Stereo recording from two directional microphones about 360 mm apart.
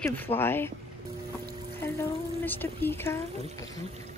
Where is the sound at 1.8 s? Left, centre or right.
Centre.